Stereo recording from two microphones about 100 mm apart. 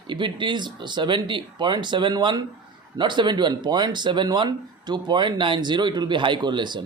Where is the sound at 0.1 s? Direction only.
55° right (ahead or behind).